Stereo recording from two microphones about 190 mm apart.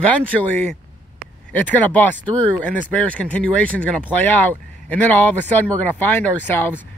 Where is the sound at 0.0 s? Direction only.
5° left (ahead or behind).